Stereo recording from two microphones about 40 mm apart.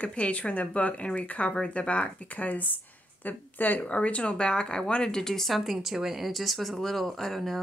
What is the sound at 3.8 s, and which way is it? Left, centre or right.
Speech, left.